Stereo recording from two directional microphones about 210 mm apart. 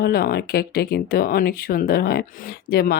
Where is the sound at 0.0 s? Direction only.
45° left (ahead or behind).